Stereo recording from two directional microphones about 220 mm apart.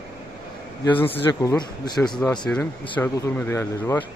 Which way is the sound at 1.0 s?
10° left (ahead or behind).